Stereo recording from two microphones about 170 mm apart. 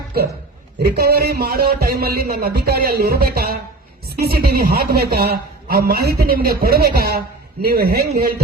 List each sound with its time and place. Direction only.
0.8 s a man's voice: 70° right (ahead or behind)